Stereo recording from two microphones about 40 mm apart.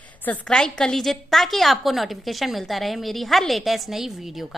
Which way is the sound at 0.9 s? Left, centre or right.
Centre.